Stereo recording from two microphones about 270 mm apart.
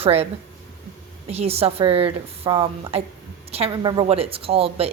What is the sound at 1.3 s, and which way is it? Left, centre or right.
A woman's voice, right.